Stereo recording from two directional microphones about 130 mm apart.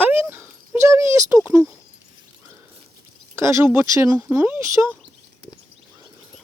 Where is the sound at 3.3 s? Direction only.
20° right (ahead or behind).